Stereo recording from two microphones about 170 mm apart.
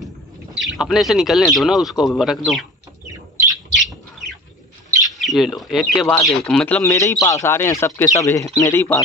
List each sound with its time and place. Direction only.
0.6 s speech: centre (ahead or behind)
3.7 s bird: centre (ahead or behind)
5.2 s a man's voice: centre (ahead or behind)